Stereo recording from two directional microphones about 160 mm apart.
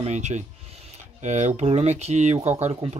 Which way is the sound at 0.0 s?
45° right (ahead or behind).